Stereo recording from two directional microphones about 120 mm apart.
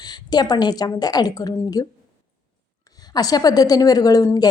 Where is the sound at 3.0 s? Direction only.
35° left (ahead or behind).